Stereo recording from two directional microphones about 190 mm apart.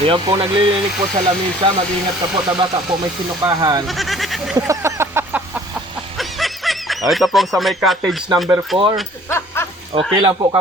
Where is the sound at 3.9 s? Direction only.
Centre (ahead or behind).